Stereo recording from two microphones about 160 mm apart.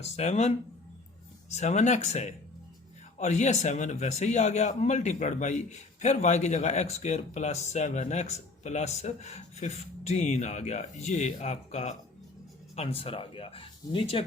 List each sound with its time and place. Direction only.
0.0 s a man's voice: 45° left (ahead or behind)